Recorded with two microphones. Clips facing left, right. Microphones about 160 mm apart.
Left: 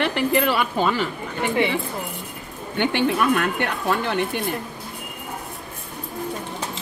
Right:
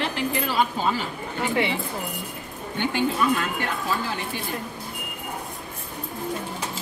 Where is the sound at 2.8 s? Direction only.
70° left (ahead or behind).